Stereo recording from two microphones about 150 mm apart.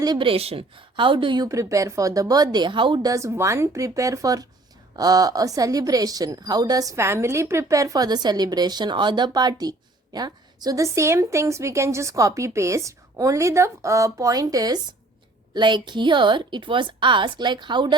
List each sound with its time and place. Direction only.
0.0 s speech: 30° right (ahead or behind)
1.5 s a woman's voice: 20° right (ahead or behind)